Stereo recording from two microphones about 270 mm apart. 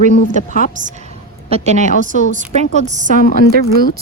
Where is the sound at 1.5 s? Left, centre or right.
Right.